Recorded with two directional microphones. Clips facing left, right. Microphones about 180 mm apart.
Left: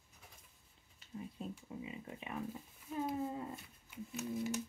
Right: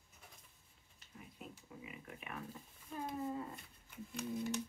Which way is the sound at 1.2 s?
30° left (ahead or behind).